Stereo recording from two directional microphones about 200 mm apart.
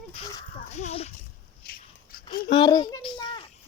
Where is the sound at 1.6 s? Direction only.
50° left (ahead or behind).